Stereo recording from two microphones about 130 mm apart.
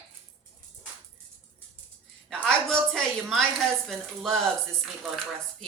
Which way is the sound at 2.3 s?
5° left (ahead or behind).